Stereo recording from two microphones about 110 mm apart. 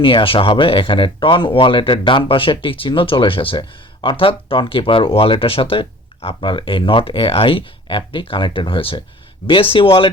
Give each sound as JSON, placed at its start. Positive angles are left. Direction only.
{"t": 0.0, "sound": "speech", "side_deg": 50}